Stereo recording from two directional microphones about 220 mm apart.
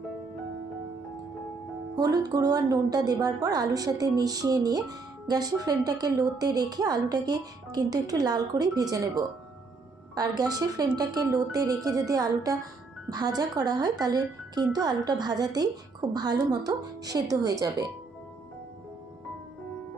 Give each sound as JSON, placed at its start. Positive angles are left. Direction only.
{"t": 2.0, "sound": "a woman's voice", "side_deg": -15}